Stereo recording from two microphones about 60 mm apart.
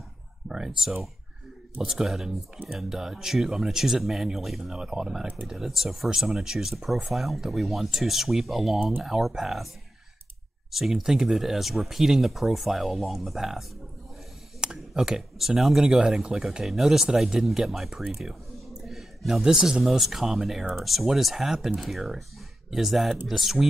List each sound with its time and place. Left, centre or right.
0.5 s speech: centre
5.2 s speech: right
5.5 s speech: centre
10.7 s speech: centre